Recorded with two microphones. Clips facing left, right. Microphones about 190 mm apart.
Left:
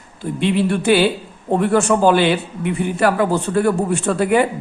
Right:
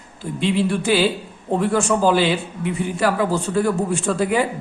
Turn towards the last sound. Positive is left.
turn(degrees=60)  # may be behind; listen again after turning